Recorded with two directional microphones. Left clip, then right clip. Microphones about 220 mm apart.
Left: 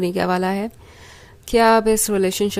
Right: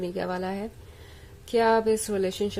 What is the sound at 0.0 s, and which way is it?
A woman's voice, 35° left (ahead or behind).